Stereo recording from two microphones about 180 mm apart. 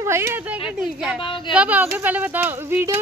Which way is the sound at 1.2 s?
25° left (ahead or behind).